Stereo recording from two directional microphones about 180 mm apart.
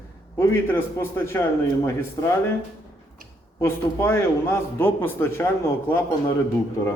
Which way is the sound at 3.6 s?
15° left (ahead or behind).